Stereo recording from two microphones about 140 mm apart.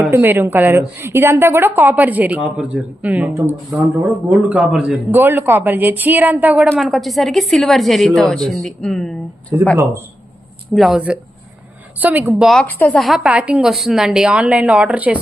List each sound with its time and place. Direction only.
0.0 s a woman's voice: 15° right (ahead or behind); by 9.1 s 5° left (ahead or behind)
9.5 s a woman's voice: 15° right (ahead or behind)
10.8 s a woman's voice: centre (ahead or behind)
11.9 s a woman's voice: 10° right (ahead or behind)
12.6 s speech: 10° left (ahead or behind)
13.0 s a woman's voice: centre (ahead or behind)